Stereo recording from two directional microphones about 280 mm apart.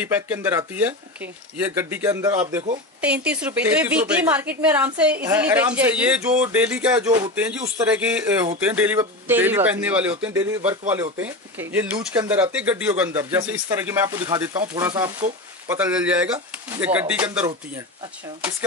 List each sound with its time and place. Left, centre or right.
0.0 s a woman's voice: centre
15.8 s a woman's voice: centre